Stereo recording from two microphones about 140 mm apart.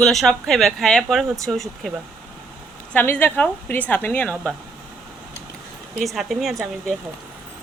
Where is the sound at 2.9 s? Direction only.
15° left (ahead or behind).